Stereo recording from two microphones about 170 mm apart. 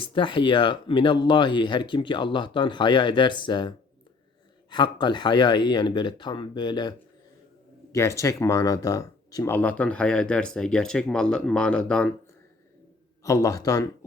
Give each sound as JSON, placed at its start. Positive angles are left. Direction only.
{"t": 0.0, "sound": "speech", "side_deg": 30}
{"t": 7.9, "sound": "speech", "side_deg": 15}
{"t": 13.2, "sound": "speech", "side_deg": 20}